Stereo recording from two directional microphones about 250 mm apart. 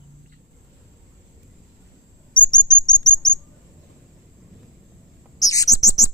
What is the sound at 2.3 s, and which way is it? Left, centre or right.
Chirp, centre.